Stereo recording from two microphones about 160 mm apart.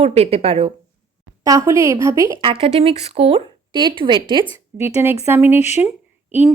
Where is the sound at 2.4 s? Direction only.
35° right (ahead or behind).